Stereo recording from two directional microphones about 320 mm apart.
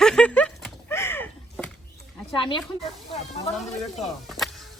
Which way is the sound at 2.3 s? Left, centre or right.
Centre.